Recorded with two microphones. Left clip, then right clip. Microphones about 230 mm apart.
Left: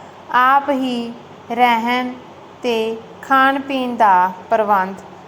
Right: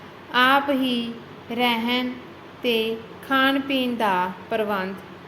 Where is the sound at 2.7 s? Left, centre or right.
Left.